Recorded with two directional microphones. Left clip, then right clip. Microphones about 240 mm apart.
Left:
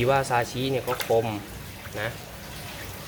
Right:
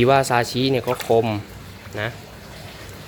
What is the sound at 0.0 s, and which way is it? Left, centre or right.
Speech, right.